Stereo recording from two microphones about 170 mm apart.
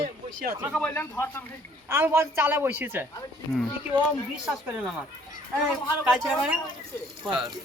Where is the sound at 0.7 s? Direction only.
5° left (ahead or behind).